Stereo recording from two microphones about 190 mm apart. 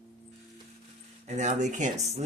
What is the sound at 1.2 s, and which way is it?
Speech, 40° right (ahead or behind).